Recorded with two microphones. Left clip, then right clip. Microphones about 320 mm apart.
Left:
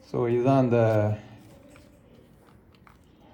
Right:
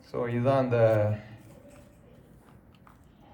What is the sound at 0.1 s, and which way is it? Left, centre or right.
Speech, centre.